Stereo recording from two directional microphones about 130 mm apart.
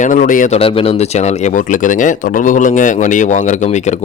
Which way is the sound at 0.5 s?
45° left (ahead or behind).